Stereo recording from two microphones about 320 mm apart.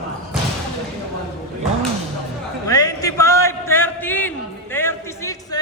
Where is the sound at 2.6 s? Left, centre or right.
Centre.